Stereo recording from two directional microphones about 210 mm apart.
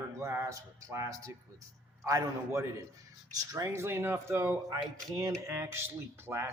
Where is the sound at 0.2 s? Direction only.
15° right (ahead or behind).